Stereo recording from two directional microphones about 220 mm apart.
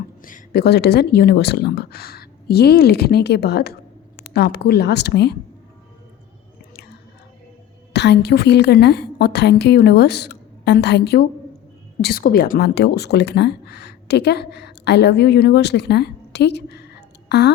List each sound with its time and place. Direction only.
0.2 s speech: 40° left (ahead or behind)
7.9 s speech: 50° left (ahead or behind)